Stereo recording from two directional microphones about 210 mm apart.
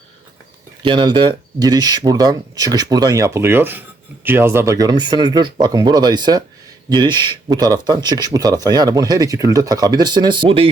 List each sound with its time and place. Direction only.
0.8 s speech: 20° right (ahead or behind)